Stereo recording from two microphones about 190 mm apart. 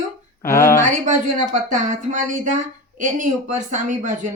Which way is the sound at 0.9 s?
40° right (ahead or behind).